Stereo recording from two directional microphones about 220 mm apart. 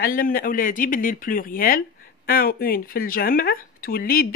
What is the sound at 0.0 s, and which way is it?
A woman's voice, 40° left (ahead or behind).